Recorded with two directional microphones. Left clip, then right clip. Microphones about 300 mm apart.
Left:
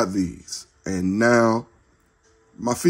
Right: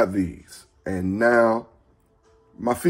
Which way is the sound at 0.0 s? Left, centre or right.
Centre.